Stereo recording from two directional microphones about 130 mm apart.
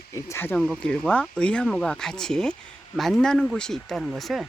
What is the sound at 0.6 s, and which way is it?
Speech, 5° left (ahead or behind).